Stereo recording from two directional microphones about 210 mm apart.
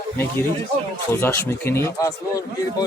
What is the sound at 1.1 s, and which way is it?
Speech, 10° left (ahead or behind).